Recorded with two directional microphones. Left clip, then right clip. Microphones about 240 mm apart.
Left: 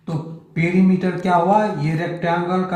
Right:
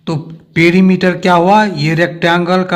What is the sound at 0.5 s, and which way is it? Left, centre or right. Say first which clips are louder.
A man's voice: right 10 dB; right.